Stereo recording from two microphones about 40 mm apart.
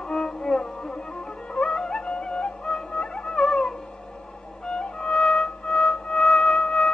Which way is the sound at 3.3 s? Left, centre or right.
Centre.